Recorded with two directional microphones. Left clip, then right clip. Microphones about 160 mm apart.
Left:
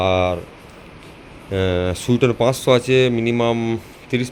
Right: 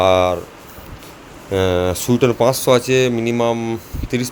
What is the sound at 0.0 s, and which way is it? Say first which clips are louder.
Speech: right 4 dB; 30° right (ahead or behind).